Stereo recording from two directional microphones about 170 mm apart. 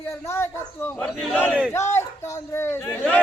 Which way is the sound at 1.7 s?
15° left (ahead or behind).